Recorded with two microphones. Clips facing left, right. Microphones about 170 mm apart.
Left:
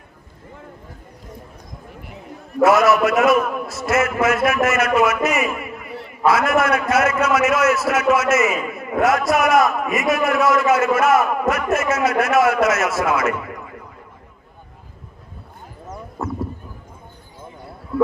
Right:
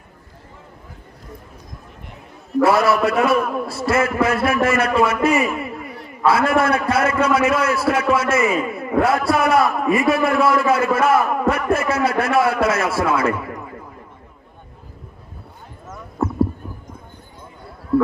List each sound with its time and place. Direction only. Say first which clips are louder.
2.6 s a man's voice: left 2 dB; 30° right (ahead or behind)